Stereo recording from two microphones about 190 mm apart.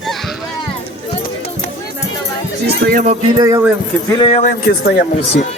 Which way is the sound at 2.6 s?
55° right (ahead or behind).